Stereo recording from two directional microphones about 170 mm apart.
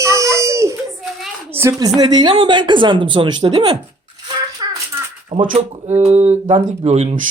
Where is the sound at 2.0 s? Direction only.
25° right (ahead or behind).